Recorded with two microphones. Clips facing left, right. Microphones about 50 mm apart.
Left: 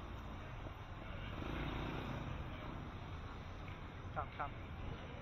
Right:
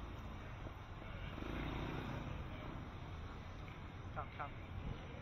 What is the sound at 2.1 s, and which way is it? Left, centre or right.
Vehicle, centre.